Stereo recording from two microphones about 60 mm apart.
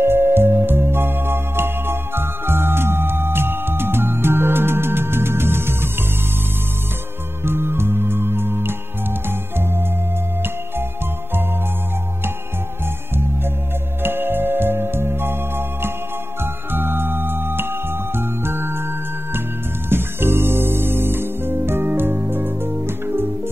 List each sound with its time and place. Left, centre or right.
0.0 s music: right
7.4 s music: right
14.0 s music: right